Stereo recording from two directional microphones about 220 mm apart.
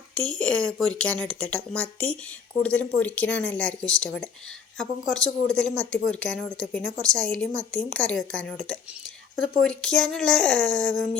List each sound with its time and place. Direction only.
0.3 s speech: 5° left (ahead or behind)